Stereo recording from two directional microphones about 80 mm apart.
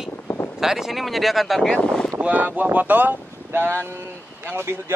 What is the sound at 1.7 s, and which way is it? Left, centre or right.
Speech, centre.